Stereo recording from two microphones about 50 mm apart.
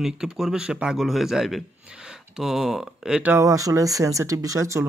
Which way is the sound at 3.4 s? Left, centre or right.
Right.